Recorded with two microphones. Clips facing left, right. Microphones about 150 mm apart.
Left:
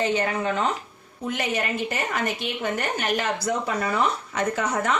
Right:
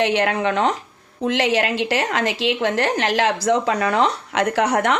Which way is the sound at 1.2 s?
90° right.